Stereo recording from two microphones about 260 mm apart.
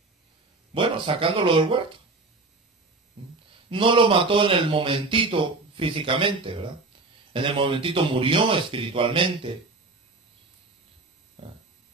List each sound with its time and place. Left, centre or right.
0.7 s speech: centre
3.7 s speech: centre